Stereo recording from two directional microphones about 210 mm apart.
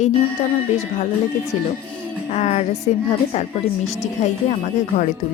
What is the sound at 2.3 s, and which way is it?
Speech, 30° left (ahead or behind).